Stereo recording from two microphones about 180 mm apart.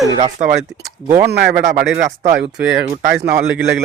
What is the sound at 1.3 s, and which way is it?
Speech, 65° right (ahead or behind).